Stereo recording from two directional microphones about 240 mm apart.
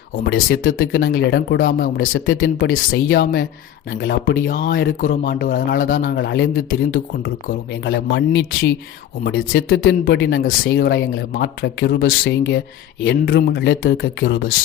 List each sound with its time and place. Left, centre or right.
0.4 s a man's voice: left
2.4 s a man's voice: left
9.6 s speech: left